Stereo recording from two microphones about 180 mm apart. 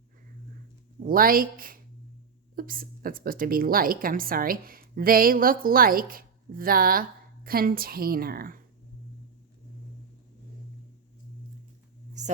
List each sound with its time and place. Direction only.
1.0 s a woman's voice: 50° right (ahead or behind)